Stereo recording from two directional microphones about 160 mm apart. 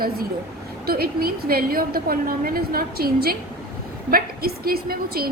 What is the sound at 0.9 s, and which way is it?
A woman's voice, 70° right (ahead or behind).